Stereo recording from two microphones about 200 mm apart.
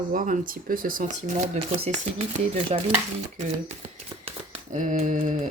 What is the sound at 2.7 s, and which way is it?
Stir, 30° right (ahead or behind).